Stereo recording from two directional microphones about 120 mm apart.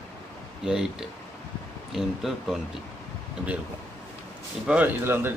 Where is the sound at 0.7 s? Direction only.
5° right (ahead or behind).